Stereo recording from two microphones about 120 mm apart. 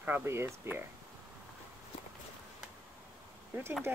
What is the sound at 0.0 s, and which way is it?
Speech, 20° right (ahead or behind).